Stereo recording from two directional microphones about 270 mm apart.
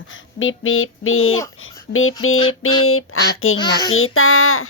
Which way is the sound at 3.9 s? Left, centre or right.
Left.